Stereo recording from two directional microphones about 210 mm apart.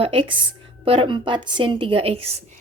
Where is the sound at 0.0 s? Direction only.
25° right (ahead or behind).